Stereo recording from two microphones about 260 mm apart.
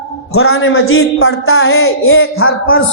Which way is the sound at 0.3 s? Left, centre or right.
Left.